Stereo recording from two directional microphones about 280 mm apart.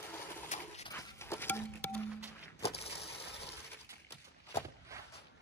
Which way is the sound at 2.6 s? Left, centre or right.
Left.